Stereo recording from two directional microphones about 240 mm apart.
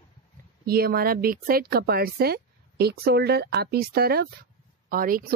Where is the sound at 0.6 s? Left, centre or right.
Right.